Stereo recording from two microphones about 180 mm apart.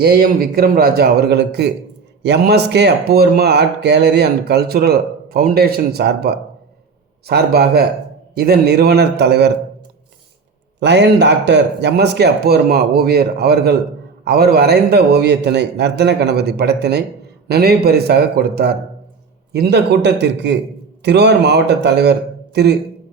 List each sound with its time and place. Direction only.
0.0 s speech: 60° right (ahead or behind)
10.8 s speech: 75° right (ahead or behind)